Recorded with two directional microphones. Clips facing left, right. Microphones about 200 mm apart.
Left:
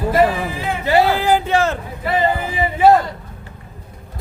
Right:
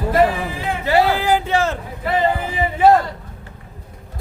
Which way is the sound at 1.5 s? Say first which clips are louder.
Left 2 dB; 50° left (ahead or behind).